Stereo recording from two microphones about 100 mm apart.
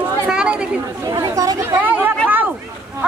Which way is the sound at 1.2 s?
40° right (ahead or behind).